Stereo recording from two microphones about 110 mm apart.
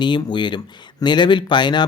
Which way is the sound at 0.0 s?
45° left (ahead or behind).